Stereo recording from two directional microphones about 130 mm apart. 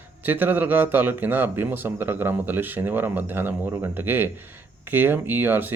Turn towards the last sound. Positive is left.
turn(degrees=-15)  # may be behind; listen again after turning